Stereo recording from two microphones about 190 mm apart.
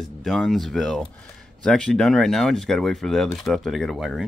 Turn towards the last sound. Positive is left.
turn(degrees=0)  # may be behind; listen again after turning